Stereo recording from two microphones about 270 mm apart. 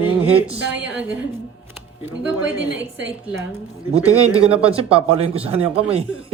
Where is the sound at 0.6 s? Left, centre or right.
Centre.